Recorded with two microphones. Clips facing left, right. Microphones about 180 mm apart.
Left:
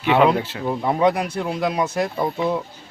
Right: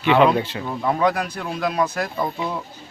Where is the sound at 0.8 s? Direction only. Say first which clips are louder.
Left 1 dB; 20° left (ahead or behind).